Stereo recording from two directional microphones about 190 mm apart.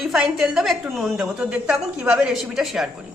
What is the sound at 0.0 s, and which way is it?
A woman's voice, centre (ahead or behind).